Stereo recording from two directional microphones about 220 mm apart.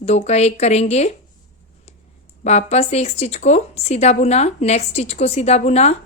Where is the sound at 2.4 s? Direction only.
30° left (ahead or behind).